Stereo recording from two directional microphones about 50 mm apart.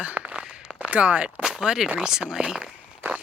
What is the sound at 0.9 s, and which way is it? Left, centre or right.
Speech, right.